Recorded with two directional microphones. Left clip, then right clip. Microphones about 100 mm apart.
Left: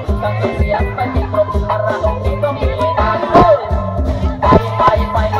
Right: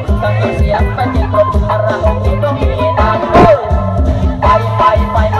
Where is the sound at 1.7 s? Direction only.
30° left (ahead or behind).